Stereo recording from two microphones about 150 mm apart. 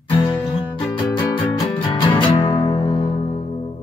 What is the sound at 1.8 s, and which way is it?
Music, 35° left (ahead or behind).